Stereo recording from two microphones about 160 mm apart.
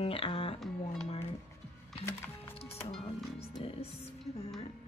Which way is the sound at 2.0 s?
15° left (ahead or behind).